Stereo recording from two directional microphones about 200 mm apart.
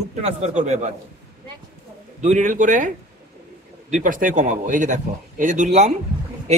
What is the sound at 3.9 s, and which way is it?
A man's voice, 40° right (ahead or behind).